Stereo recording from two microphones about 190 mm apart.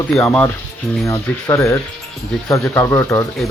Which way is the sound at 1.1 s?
15° left (ahead or behind).